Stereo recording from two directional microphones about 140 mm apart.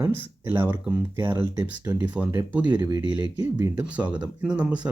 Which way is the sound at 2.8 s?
25° right (ahead or behind).